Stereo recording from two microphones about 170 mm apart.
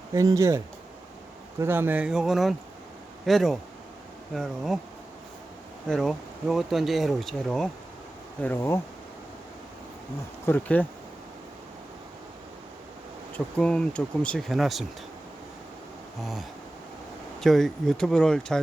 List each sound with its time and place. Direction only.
0.1 s speech: 20° right (ahead or behind); by 4.8 s centre (ahead or behind)
5.9 s speech: centre (ahead or behind)
10.4 s speech: 10° left (ahead or behind)
13.3 s speech: 5° left (ahead or behind)
16.2 s speech: centre (ahead or behind)